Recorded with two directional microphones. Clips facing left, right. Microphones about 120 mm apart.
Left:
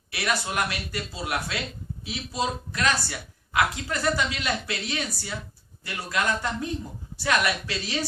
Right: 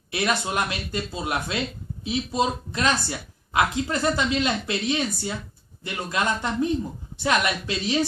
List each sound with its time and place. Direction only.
0.1 s speech: 25° right (ahead or behind)